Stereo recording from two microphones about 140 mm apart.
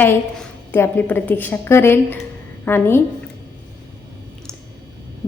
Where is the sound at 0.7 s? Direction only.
15° left (ahead or behind).